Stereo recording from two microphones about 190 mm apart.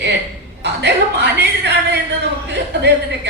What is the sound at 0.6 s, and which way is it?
A woman's voice, 65° right (ahead or behind).